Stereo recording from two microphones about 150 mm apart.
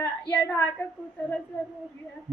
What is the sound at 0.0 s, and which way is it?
Speech, 10° left (ahead or behind).